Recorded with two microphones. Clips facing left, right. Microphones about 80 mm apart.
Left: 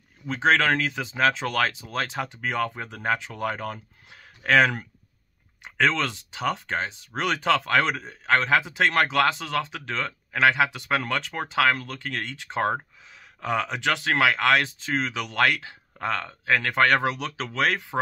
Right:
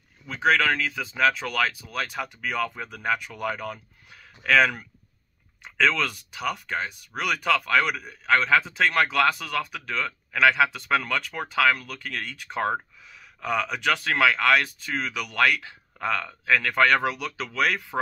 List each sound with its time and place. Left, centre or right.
0.3 s speech: left
5.6 s speech: left
12.7 s a sound: left
13.8 s speech: left